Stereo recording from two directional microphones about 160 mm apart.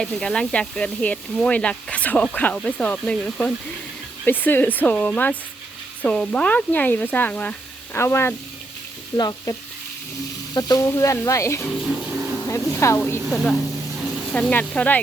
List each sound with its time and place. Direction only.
0.0 s sizzle: 5° left (ahead or behind)
9.1 s speech: 25° left (ahead or behind)
12.5 s sizzle: 20° left (ahead or behind)
13.3 s a woman's voice: centre (ahead or behind)
14.3 s sizzle: 10° left (ahead or behind)